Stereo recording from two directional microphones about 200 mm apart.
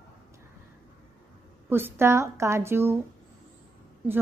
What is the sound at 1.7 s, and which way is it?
A woman's voice, 10° right (ahead or behind).